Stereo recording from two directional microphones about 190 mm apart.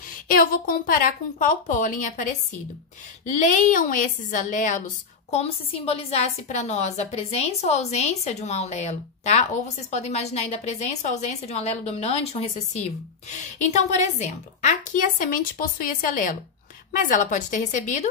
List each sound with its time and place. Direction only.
0.3 s a woman's voice: 50° left (ahead or behind)
3.3 s a woman's voice: 40° left (ahead or behind)